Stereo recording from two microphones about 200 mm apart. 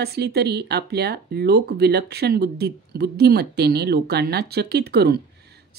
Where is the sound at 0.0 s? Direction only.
55° right (ahead or behind).